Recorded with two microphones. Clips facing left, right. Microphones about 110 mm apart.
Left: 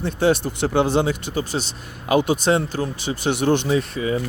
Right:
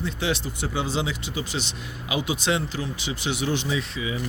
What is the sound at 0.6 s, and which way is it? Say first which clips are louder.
Speech: left 8 dB; 65° left (ahead or behind).